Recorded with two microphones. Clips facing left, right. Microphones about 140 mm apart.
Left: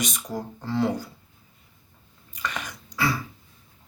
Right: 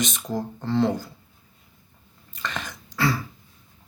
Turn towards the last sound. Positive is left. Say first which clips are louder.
# right 2 dB
turn(degrees=15)  # may be behind; listen again after turning